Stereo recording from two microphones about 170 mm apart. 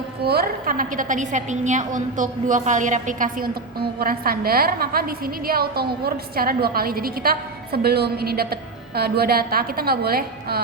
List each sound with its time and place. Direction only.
0.2 s a woman's voice: 65° right (ahead or behind)